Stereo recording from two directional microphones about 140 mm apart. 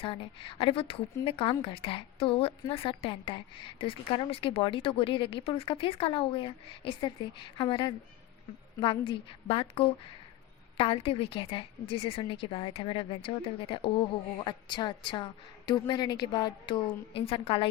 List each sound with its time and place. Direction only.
0.0 s a woman's voice: 40° left (ahead or behind)